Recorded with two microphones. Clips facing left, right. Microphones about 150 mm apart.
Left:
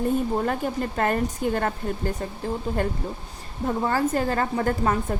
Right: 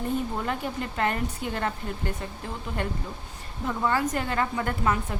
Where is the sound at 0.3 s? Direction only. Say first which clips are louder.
Left 5 dB; 45° left (ahead or behind).